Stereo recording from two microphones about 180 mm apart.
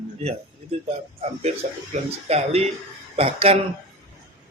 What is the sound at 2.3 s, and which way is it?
Speech, 35° right (ahead or behind).